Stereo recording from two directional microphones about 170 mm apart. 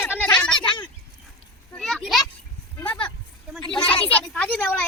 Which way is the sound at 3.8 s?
10° left (ahead or behind).